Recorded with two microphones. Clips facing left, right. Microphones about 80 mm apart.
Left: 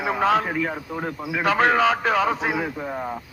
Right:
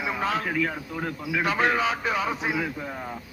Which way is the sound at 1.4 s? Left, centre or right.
Left.